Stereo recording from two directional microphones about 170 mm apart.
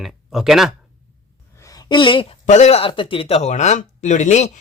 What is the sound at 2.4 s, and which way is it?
Speech, 45° left (ahead or behind).